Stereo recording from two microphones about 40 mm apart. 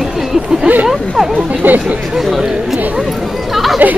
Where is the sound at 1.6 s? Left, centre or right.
Right.